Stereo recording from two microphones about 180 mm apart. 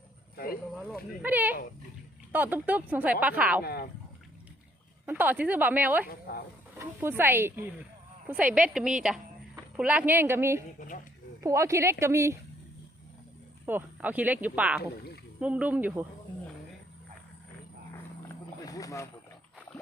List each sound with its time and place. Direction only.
1.2 s speech: 10° right (ahead or behind)
3.6 s speech: 60° left (ahead or behind)
5.0 s speech: 10° right (ahead or behind)
6.1 s speech: 55° left (ahead or behind)
6.7 s a woman's voice: 15° right (ahead or behind)
10.8 s speech: 45° left (ahead or behind)
11.4 s speech: 15° right (ahead or behind)
13.7 s speech: 10° right (ahead or behind)
14.8 s speech: 60° left (ahead or behind)
15.4 s speech: 5° right (ahead or behind)
18.6 s a sound: 20° left (ahead or behind)